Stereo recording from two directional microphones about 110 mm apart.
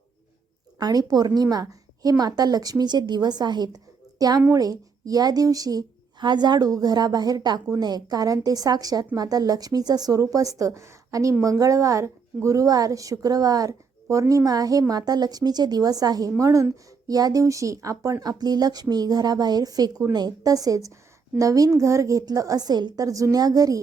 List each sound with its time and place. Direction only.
0.8 s a woman's voice: 35° right (ahead or behind)